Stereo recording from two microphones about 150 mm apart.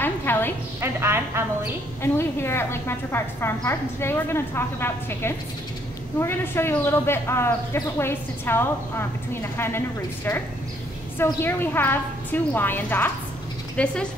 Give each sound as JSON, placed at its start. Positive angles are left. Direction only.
{"t": 0.0, "sound": "music", "side_deg": 15}
{"t": 0.7, "sound": "a woman's voice", "side_deg": -15}
{"t": 2.0, "sound": "a man's voice", "side_deg": 15}
{"t": 11.4, "sound": "a man's voice", "side_deg": 15}